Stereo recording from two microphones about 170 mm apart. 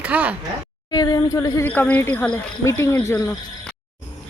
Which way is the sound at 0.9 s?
20° left (ahead or behind).